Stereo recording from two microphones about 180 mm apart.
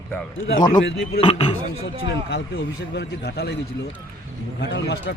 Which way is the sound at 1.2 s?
25° left (ahead or behind).